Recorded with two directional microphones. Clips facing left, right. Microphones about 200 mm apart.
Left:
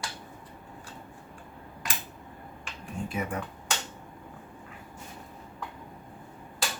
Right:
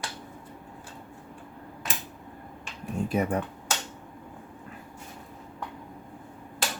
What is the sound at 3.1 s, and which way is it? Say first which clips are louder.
Speech: right 7 dB; 40° right (ahead or behind).